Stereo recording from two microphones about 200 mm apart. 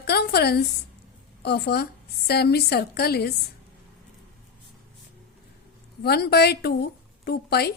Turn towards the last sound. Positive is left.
turn(degrees=50)  # may be behind; listen again after turning